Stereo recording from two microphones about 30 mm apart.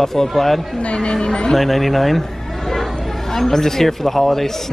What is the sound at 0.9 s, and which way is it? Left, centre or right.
Speech, left.